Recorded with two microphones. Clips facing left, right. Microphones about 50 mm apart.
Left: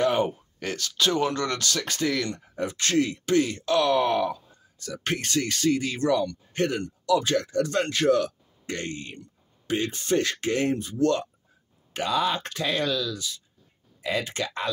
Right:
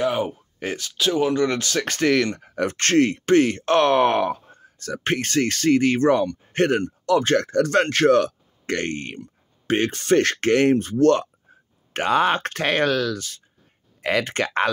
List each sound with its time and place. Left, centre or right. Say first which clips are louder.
0.0 s a sound: even; centre
0.6 s speech: right 4 dB; centre
0.9 s speech: right 4 dB; centre; by 1.8 s right
1.8 s speech: right 10 dB; right